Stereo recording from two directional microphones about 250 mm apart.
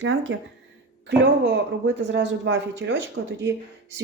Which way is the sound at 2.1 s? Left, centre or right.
Right.